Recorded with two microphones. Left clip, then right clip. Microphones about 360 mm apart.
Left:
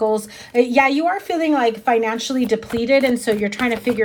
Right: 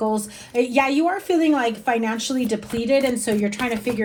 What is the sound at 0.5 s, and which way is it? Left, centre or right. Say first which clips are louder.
A woman's voice: left 4 dB; left.